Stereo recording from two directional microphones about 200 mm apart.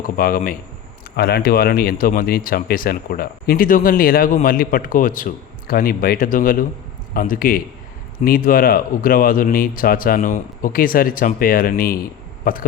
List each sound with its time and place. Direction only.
0.2 s speech: 45° left (ahead or behind)